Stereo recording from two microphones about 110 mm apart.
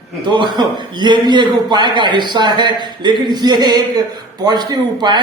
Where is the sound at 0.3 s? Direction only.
45° right (ahead or behind).